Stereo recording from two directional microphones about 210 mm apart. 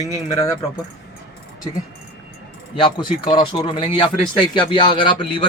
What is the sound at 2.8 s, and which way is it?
Speech, 20° left (ahead or behind).